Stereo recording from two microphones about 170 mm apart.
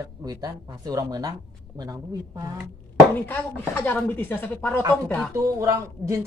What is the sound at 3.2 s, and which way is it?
Speech, 10° left (ahead or behind).